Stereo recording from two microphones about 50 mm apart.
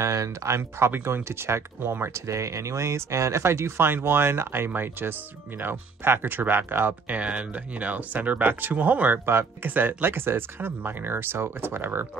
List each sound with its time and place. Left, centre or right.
0.0 s speech: right
2.1 s speech: right
7.1 s speech: right
9.2 s speech: right
9.7 s speech: right